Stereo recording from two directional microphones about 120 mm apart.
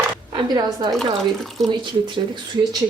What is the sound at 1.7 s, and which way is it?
Speech, 40° right (ahead or behind).